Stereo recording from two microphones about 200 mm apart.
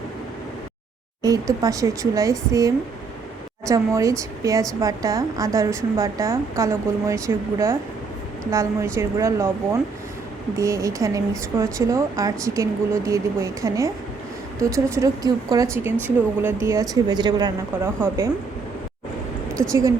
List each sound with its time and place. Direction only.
1.2 s speech: 15° right (ahead or behind)
19.6 s speech: 10° right (ahead or behind)